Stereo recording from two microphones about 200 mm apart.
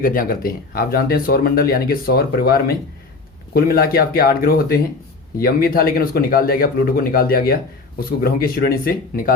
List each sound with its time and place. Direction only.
0.0 s speech: 45° left (ahead or behind)